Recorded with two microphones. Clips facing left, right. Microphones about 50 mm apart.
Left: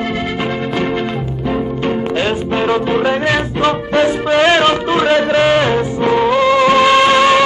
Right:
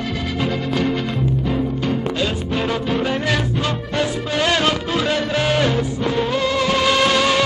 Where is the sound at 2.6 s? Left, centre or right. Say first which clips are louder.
Left 6 dB; left.